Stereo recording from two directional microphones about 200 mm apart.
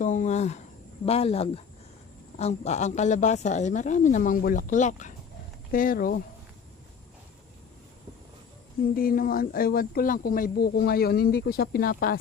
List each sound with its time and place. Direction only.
0.0 s a sound: 40° left (ahead or behind)
1.0 s speech: 30° left (ahead or behind); by 6.2 s 45° left (ahead or behind)
9.0 s speech: 45° left (ahead or behind)